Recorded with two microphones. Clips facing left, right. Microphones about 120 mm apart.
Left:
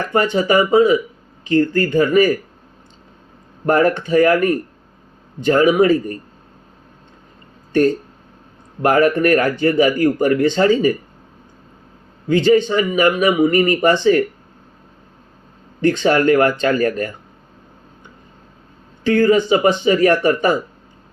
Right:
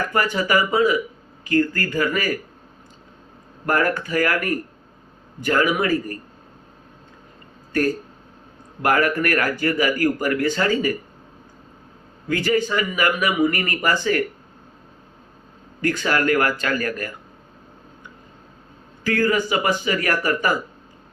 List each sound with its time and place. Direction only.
0.1 s a man's voice: 25° left (ahead or behind)
3.7 s a man's voice: 25° left (ahead or behind)
7.7 s a man's voice: 25° left (ahead or behind)
12.3 s a man's voice: 25° left (ahead or behind)
15.8 s a man's voice: 25° left (ahead or behind)
19.0 s a man's voice: 25° left (ahead or behind)